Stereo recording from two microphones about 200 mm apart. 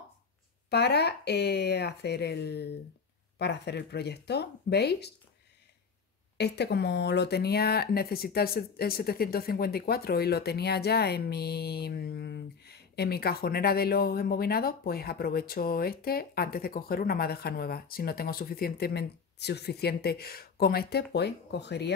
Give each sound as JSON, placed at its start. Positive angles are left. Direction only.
{"t": 0.7, "sound": "speech", "side_deg": 55}
{"t": 6.3, "sound": "speech", "side_deg": 55}